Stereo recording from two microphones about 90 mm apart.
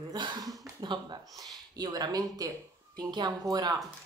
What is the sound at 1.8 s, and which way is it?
Speech, 50° right (ahead or behind).